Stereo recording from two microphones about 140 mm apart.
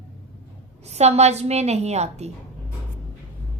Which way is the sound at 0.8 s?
50° right (ahead or behind).